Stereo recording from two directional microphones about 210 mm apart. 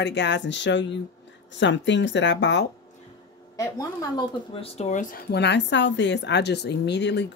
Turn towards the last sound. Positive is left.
turn(degrees=55)  # may be behind; listen again after turning